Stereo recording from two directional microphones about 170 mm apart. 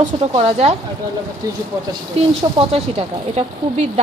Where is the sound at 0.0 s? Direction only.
35° right (ahead or behind).